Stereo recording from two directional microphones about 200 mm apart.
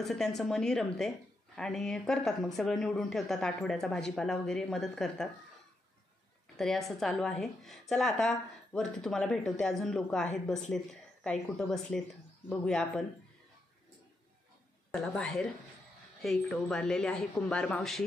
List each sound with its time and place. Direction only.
0.0 s speech: centre (ahead or behind)
6.5 s a woman's voice: centre (ahead or behind)
14.9 s speech: centre (ahead or behind)